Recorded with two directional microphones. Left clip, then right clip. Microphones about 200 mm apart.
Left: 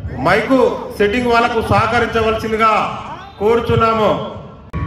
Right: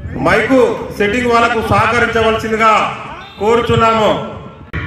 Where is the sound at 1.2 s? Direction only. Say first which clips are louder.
Right 5 dB; 35° left (ahead or behind).